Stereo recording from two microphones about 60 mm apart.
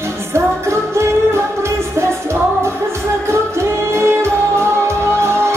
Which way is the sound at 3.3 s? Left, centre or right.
Right.